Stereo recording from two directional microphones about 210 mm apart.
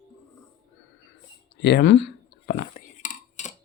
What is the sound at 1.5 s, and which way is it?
Cutlery, 55° left (ahead or behind).